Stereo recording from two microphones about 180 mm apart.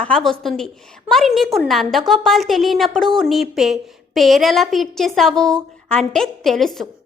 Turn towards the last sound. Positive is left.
turn(degrees=0)  # may be behind; listen again after turning